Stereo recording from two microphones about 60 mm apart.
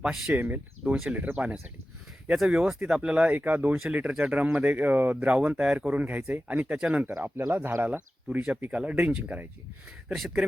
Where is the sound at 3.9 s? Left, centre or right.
Centre.